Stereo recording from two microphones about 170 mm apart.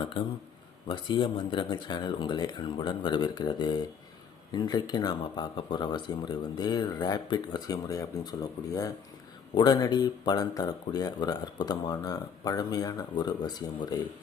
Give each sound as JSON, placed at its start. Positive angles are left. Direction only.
{"t": 0.9, "sound": "speech", "side_deg": 30}